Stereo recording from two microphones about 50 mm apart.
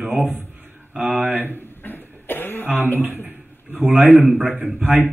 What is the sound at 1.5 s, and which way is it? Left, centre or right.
Cough, left.